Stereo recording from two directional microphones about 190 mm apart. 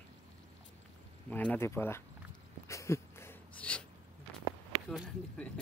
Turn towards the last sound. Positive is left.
turn(degrees=5)  # may be behind; listen again after turning